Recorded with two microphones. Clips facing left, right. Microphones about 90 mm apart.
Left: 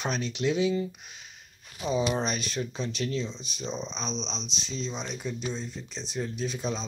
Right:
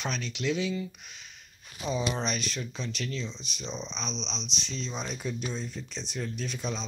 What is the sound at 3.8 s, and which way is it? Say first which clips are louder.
Speech: left 3 dB; 40° left (ahead or behind).